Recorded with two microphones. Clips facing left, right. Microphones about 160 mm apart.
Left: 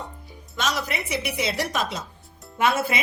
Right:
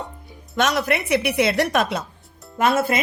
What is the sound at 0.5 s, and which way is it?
A woman's voice, 55° right (ahead or behind).